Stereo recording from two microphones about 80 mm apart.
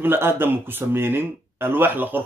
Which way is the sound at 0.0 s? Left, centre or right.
Right.